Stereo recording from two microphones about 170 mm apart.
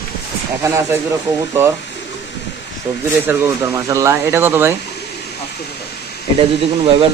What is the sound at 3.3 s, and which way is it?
Speech, 15° right (ahead or behind).